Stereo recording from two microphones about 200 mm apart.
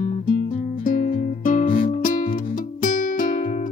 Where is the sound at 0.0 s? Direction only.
40° left (ahead or behind).